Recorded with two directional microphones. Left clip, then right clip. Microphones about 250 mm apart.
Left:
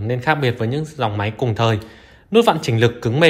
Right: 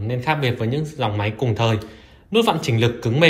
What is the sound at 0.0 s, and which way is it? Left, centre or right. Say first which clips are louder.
Speech: left 3 dB; left.